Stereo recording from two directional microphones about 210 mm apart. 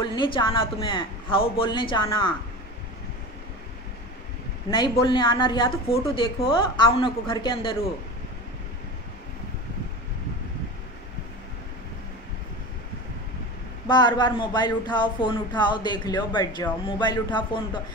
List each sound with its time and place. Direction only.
0.0 s speech: 20° left (ahead or behind)
4.6 s speech: 25° left (ahead or behind)
13.8 s speech: 20° left (ahead or behind)